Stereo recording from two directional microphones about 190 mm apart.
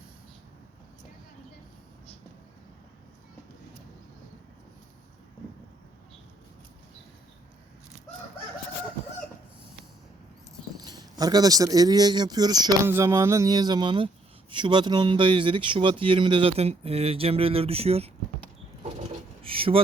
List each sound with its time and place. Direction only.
10.8 s speech: 20° right (ahead or behind)
19.4 s vehicle: 30° right (ahead or behind)